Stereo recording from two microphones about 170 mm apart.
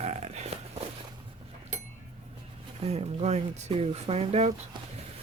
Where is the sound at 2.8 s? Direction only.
40° right (ahead or behind).